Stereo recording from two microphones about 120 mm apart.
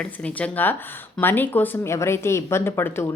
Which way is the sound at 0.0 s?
10° left (ahead or behind).